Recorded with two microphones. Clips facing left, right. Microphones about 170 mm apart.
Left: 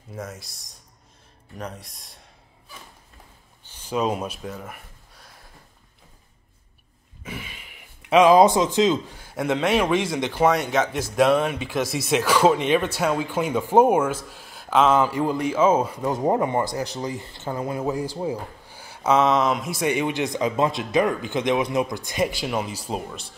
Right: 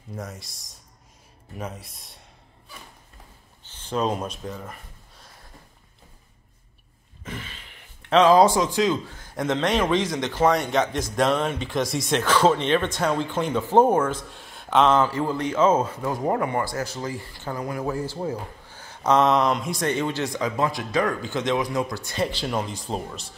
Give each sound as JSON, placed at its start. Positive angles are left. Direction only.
{"t": 0.1, "sound": "a man's voice", "side_deg": 0}
{"t": 3.6, "sound": "a sound", "side_deg": 10}
{"t": 7.2, "sound": "a man's voice", "side_deg": 10}